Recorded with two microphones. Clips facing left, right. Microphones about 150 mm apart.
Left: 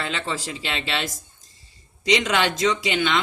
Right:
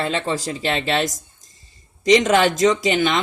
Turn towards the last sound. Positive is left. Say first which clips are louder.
# right 4 dB
turn(degrees=-40)  # may be behind; listen again after turning